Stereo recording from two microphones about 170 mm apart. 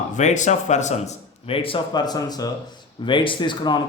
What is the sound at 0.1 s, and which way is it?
A man's voice, 45° left (ahead or behind).